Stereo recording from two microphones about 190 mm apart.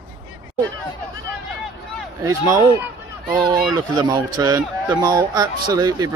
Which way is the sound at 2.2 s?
15° right (ahead or behind).